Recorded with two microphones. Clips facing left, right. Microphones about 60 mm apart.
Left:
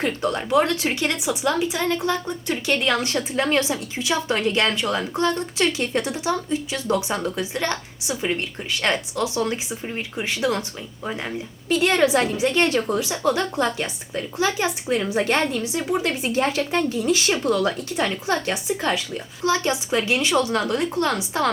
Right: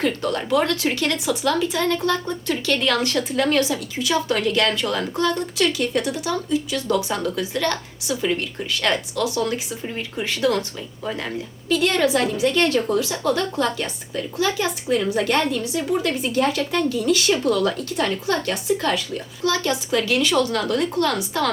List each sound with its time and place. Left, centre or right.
0.0 s a woman's voice: left